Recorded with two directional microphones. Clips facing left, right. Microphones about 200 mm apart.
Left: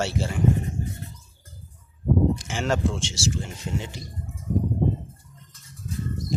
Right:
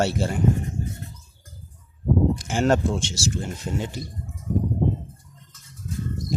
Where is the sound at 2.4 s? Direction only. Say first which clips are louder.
Right 4 dB; 55° right (ahead or behind).